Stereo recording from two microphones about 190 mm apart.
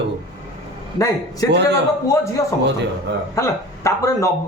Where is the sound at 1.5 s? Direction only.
65° right (ahead or behind).